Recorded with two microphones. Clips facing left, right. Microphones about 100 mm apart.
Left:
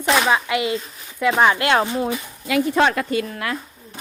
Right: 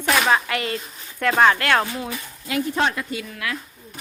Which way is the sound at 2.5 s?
90° left.